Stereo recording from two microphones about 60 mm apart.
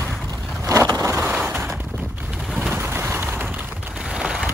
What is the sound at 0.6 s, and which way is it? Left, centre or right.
Vehicle, right.